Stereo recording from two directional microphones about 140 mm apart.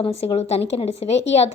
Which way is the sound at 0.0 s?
45° left (ahead or behind).